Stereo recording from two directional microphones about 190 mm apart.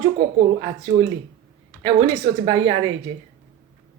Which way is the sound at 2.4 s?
25° right (ahead or behind).